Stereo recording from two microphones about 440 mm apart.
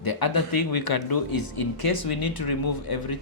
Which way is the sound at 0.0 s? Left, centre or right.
Left.